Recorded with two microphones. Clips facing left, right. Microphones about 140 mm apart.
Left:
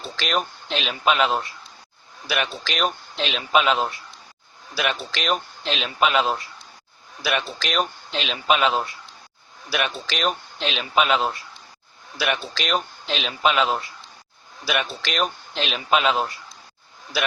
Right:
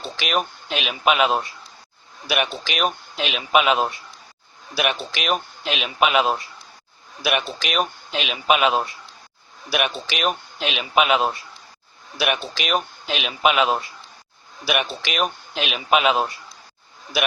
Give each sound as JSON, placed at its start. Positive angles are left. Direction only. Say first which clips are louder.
{"t": 0.0, "sound": "a man's voice", "louder": "right 1 dB", "side_deg": -10}
{"t": 2.7, "sound": "speech", "louder": "right 1 dB", "side_deg": -5}
{"t": 5.2, "sound": "speech", "louder": "right 1 dB", "side_deg": -5}